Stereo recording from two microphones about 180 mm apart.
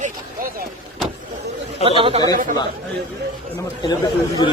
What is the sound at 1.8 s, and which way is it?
Speech, 30° right (ahead or behind).